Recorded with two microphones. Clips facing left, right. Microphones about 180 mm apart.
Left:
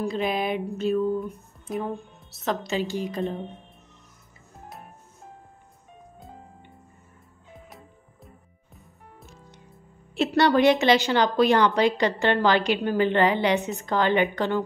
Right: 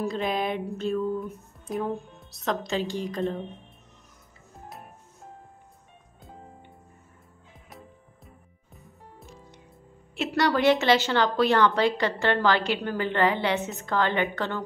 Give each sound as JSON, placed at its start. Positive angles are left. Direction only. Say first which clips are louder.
{"t": 0.0, "sound": "a sound", "louder": "left 1 dB", "side_deg": 0}
{"t": 1.2, "sound": "a woman's voice", "louder": "left 2 dB", "side_deg": 0}
{"t": 6.1, "sound": "music", "louder": "right 1 dB", "side_deg": 0}
{"t": 10.1, "sound": "a woman's voice", "louder": "left 4 dB", "side_deg": 30}